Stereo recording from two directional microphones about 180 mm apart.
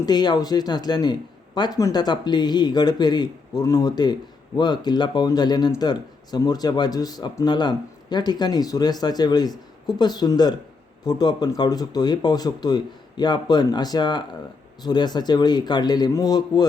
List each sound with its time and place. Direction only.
0.0 s speech: 25° left (ahead or behind)